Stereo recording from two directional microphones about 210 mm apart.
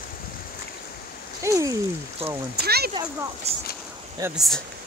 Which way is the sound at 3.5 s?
30° right (ahead or behind).